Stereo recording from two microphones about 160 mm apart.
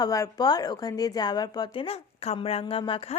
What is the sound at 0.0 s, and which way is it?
A woman's voice, 25° left (ahead or behind).